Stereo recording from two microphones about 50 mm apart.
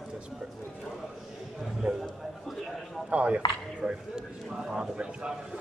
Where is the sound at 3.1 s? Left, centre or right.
Right.